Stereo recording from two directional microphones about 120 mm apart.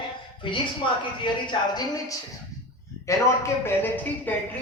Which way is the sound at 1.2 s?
35° left (ahead or behind).